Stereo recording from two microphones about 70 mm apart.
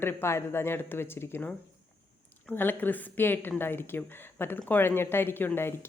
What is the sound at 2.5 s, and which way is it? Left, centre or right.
Speech, left.